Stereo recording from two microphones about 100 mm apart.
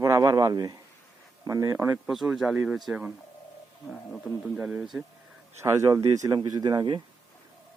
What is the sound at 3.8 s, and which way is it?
Speech, 5° left (ahead or behind).